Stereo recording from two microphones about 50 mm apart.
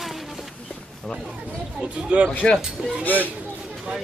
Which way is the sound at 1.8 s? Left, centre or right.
Centre.